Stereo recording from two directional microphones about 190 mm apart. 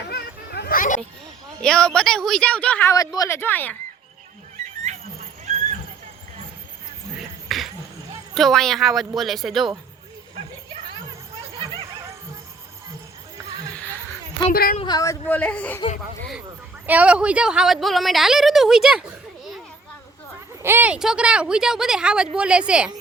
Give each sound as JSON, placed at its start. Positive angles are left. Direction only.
{"t": 0.1, "sound": "children playing", "side_deg": 60}
{"t": 1.6, "sound": "a woman's voice", "side_deg": 5}
{"t": 2.9, "sound": "speech", "side_deg": 20}
{"t": 7.2, "sound": "a sound", "side_deg": 0}
{"t": 8.4, "sound": "a woman's voice", "side_deg": 0}
{"t": 13.7, "sound": "a sound", "side_deg": 10}
{"t": 14.5, "sound": "a woman's voice", "side_deg": 50}
{"t": 14.8, "sound": "speech", "side_deg": 20}
{"t": 16.8, "sound": "a woman's voice", "side_deg": -10}
{"t": 20.6, "sound": "a woman's voice", "side_deg": -10}